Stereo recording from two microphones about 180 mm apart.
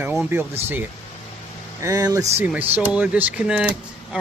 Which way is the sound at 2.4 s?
10° right (ahead or behind).